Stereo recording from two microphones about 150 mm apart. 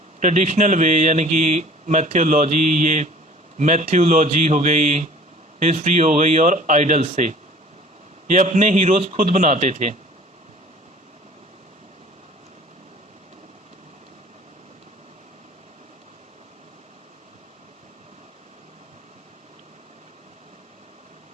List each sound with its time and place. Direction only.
0.2 s speech: 55° right (ahead or behind)